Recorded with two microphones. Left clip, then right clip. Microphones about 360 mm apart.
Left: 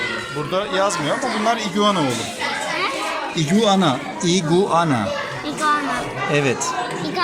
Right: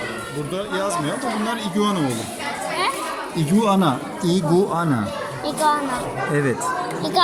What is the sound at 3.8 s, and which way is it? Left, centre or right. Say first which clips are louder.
Speech: left 2 dB; centre.